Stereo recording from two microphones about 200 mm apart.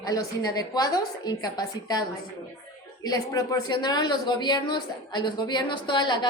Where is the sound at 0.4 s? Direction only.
20° left (ahead or behind).